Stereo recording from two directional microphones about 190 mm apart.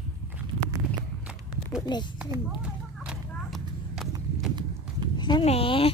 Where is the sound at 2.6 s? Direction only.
5° right (ahead or behind).